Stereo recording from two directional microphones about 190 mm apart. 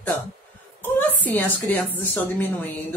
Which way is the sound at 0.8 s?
10° left (ahead or behind).